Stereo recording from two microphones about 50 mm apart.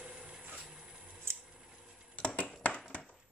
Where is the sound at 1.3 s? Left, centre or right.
Right.